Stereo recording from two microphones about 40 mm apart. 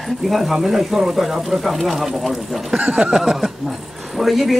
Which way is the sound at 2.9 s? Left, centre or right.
Right.